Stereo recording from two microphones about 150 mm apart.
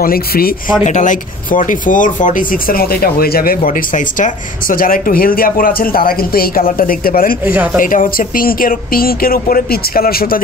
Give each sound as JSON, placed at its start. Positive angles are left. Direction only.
{"t": 0.0, "sound": "speech", "side_deg": 85}
{"t": 0.8, "sound": "speech", "side_deg": 55}
{"t": 7.4, "sound": "speech", "side_deg": -10}
{"t": 7.8, "sound": "speech", "side_deg": 65}